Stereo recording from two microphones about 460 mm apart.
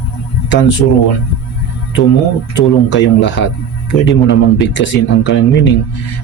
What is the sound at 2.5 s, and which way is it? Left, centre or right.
Speech, left.